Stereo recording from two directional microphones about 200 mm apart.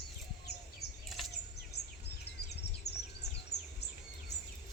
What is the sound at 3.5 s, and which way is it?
Bird, 55° left (ahead or behind).